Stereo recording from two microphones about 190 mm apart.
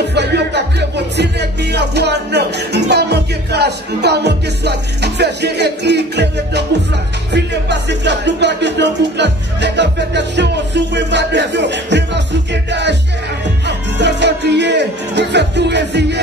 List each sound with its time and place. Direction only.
0.1 s music: 60° right (ahead or behind)
13.7 s music: 65° right (ahead or behind)